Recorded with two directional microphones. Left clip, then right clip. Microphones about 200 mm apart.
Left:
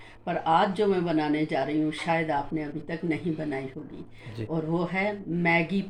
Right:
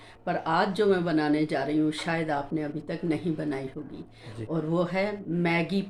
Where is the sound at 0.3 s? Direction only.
20° right (ahead or behind).